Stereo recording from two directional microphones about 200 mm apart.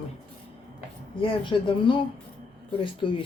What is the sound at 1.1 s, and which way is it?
Speech, 25° left (ahead or behind).